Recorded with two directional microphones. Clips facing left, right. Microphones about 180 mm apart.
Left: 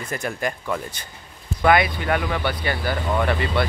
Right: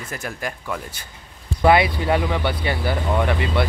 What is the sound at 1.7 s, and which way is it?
Speech, 25° right (ahead or behind).